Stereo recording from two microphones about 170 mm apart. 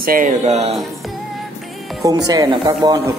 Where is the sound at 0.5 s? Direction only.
40° right (ahead or behind).